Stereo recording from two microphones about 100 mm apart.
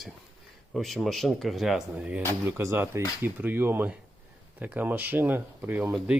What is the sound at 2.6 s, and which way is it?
Speech, 25° right (ahead or behind).